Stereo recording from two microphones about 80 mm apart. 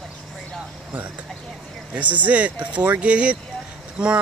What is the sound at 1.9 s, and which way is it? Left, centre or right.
Speech, centre.